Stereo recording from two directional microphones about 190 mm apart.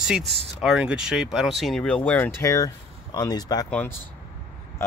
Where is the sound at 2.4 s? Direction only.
15° left (ahead or behind).